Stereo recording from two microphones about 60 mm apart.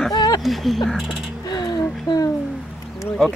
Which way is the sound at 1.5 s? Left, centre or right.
Left.